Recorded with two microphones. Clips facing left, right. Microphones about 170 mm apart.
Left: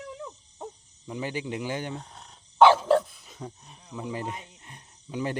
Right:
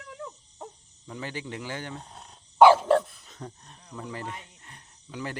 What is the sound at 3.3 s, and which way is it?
Speech, 10° left (ahead or behind).